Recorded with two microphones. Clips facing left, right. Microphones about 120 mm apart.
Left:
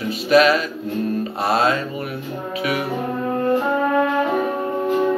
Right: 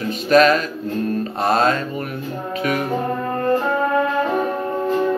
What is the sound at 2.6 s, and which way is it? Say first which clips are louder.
Music: right 1 dB; 5° left (ahead or behind).